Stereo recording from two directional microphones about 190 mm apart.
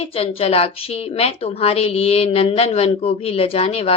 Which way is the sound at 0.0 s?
30° left (ahead or behind).